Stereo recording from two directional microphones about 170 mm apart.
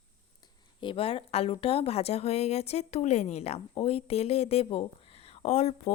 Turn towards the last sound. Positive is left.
turn(degrees=40)  # may be behind; listen again after turning